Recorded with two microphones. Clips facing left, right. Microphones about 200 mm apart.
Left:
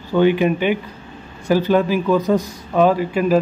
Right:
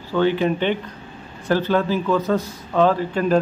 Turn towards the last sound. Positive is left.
turn(degrees=10)  # may be behind; listen again after turning